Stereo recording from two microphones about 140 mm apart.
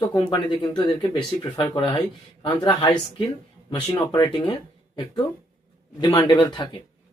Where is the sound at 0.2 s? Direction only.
35° left (ahead or behind).